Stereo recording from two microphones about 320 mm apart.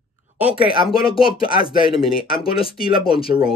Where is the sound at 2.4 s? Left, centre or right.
Centre.